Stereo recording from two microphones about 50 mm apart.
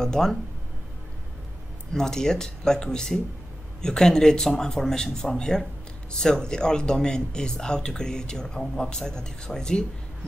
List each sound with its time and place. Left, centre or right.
0.0 s speech: centre
2.0 s speech: centre